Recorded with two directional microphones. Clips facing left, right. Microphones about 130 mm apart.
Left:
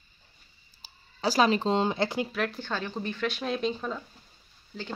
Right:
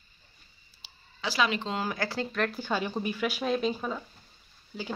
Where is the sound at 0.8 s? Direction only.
40° left (ahead or behind); by 2.2 s 20° left (ahead or behind).